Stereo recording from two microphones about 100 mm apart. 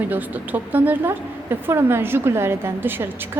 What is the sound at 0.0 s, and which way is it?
A woman's voice, 15° right (ahead or behind).